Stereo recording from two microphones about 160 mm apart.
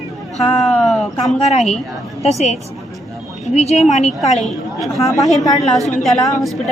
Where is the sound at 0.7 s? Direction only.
5° left (ahead or behind).